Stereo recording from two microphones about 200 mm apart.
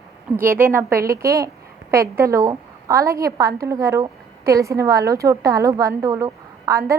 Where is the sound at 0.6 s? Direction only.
10° right (ahead or behind).